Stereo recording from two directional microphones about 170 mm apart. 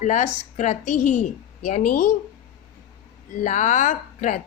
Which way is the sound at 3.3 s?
45° left (ahead or behind).